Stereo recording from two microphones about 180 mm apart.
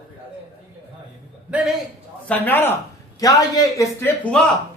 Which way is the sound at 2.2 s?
10° left (ahead or behind).